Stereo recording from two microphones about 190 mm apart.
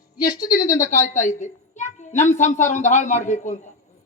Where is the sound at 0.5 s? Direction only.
15° left (ahead or behind).